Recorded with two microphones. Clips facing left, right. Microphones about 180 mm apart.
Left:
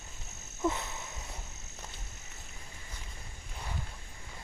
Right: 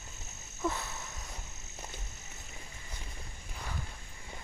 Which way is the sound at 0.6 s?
20° left (ahead or behind).